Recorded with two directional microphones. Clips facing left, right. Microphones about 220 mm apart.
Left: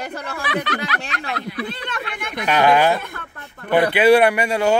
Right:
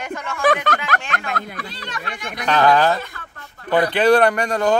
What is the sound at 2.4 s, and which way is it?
Speech, 10° left (ahead or behind).